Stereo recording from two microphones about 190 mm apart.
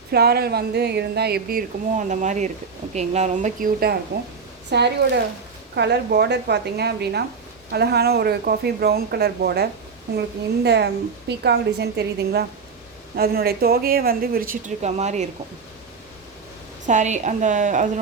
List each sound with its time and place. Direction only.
0.1 s a woman's voice: 55° right (ahead or behind); by 3.7 s 40° right (ahead or behind)
4.7 s speech: 60° right (ahead or behind); by 15.3 s 35° right (ahead or behind)
16.8 s a woman's voice: 40° right (ahead or behind)